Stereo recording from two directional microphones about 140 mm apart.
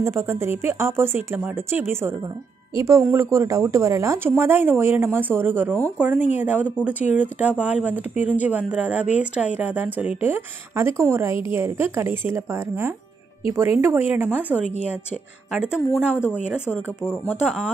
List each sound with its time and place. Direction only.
0.0 s speech: 20° right (ahead or behind)
3.2 s speech: 20° right (ahead or behind)
17.3 s speech: 5° right (ahead or behind)